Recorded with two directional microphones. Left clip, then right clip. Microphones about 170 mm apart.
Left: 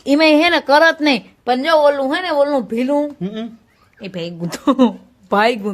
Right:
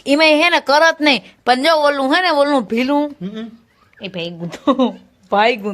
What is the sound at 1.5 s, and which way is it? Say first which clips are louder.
Speech: right 4 dB; 20° right (ahead or behind).